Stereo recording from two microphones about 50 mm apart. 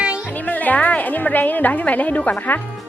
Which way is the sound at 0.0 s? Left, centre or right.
Right.